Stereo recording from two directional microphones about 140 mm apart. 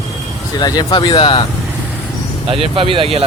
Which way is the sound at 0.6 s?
30° left (ahead or behind).